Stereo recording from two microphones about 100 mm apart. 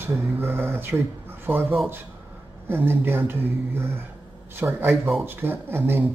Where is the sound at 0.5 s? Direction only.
20° right (ahead or behind).